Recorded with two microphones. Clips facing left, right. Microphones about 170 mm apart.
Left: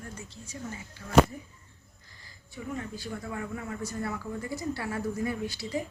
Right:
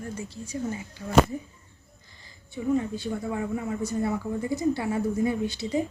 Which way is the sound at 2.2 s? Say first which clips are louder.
Right 11 dB; 25° right (ahead or behind).